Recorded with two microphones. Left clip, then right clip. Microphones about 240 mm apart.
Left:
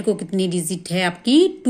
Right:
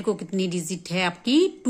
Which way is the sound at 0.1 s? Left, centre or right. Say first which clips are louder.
Left 5 dB; right.